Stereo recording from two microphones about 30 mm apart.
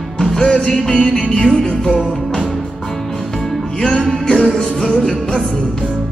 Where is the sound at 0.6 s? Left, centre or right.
Centre.